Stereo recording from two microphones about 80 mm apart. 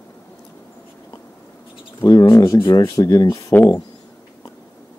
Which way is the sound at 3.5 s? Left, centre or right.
Left.